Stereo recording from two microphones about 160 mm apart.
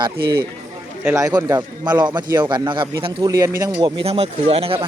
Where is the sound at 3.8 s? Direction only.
40° right (ahead or behind).